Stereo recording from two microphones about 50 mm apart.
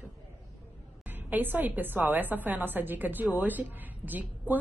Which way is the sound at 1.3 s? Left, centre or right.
Right.